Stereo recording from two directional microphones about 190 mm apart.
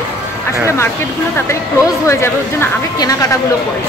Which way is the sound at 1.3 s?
15° left (ahead or behind).